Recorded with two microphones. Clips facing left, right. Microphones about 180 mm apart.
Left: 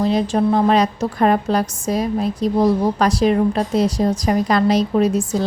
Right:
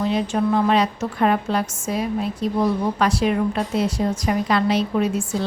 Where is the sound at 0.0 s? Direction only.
35° left (ahead or behind).